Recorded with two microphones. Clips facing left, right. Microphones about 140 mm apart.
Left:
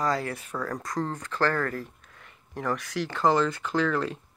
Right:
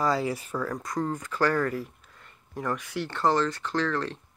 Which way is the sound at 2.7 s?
90° left.